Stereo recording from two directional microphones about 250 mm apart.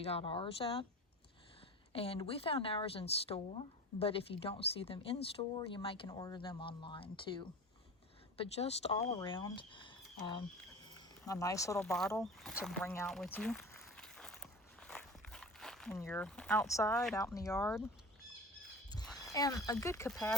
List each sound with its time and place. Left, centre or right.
0.0 s speech: left
1.9 s speech: left
11.9 s a sound: centre
17.2 s speech: centre
19.2 s speech: centre